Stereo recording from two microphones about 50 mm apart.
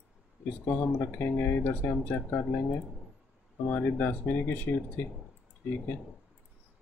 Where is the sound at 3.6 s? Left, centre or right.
Left.